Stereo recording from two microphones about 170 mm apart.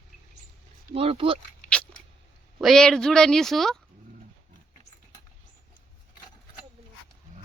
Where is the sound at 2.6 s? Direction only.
Centre (ahead or behind).